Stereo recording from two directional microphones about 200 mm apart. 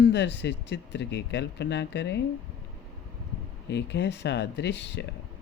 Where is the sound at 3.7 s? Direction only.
60° left (ahead or behind).